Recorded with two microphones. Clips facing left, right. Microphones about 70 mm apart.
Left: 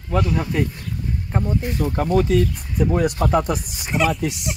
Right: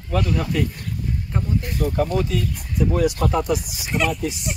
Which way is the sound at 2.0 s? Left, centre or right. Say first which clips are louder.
Left 6 dB; left.